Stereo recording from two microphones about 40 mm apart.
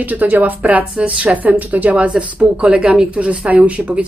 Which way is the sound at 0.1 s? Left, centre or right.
Right.